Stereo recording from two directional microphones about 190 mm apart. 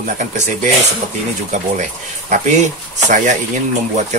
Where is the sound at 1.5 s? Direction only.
40° right (ahead or behind).